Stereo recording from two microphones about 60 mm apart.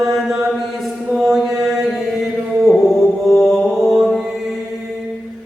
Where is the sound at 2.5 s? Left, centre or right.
Centre.